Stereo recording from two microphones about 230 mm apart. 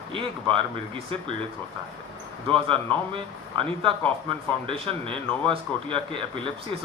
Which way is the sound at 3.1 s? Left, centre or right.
Right.